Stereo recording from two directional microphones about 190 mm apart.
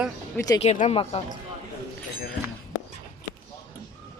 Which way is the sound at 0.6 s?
35° left (ahead or behind).